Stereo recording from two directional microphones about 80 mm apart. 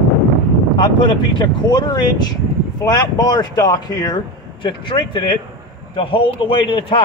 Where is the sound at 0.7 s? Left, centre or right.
Left.